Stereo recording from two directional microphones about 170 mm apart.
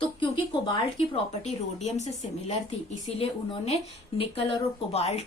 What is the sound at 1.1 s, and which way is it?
Speech, 40° left (ahead or behind).